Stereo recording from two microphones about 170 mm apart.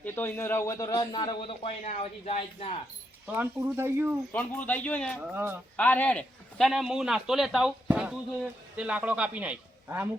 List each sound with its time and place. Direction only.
0.0 s a man's voice: 10° left (ahead or behind); by 1.7 s 30° left (ahead or behind)
1.8 s speech: 40° left (ahead or behind)
3.2 s speech: 10° right (ahead or behind)
4.3 s a man's voice: 10° left (ahead or behind)
5.2 s speech: 10° right (ahead or behind)
5.7 s a man's voice: 10° left (ahead or behind); by 10.1 s 10° right (ahead or behind)